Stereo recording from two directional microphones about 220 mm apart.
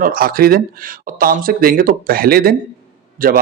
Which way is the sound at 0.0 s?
40° right (ahead or behind).